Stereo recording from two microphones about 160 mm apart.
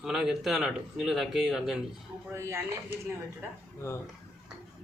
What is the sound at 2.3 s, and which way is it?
Speech, 15° right (ahead or behind).